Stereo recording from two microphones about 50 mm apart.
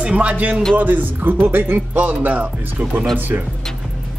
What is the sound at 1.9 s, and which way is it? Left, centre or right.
Speech, right.